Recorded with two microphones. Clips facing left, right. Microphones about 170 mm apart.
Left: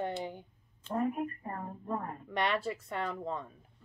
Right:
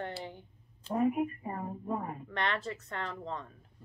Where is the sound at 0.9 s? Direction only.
10° right (ahead or behind).